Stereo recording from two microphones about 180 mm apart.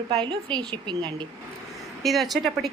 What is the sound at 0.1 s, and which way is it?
A woman's voice, 25° right (ahead or behind).